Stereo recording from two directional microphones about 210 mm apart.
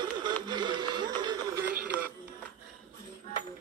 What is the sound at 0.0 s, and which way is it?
Music, 20° right (ahead or behind).